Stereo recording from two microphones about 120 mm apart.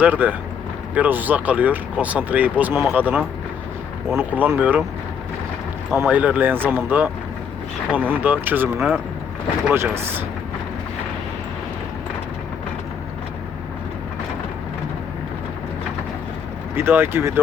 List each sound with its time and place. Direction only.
0.0 s speech: 15° right (ahead or behind)
6.0 s speech: 15° right (ahead or behind)
16.7 s speech: 20° right (ahead or behind)